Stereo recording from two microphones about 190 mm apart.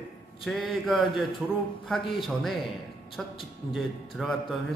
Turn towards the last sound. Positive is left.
turn(degrees=0)  # may be behind; listen again after turning